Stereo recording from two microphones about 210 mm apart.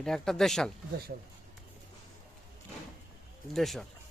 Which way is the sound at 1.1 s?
45° right (ahead or behind).